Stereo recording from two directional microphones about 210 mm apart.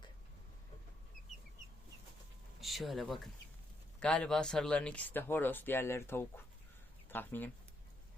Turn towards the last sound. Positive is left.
turn(degrees=10)  # may be behind; listen again after turning